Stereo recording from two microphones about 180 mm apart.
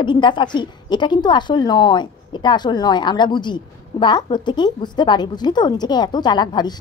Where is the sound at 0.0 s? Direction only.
25° left (ahead or behind).